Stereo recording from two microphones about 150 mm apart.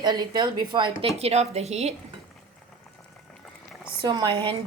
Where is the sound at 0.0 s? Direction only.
30° right (ahead or behind); by 2.0 s 45° right (ahead or behind).